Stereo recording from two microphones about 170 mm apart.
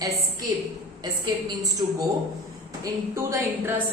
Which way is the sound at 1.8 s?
30° right (ahead or behind).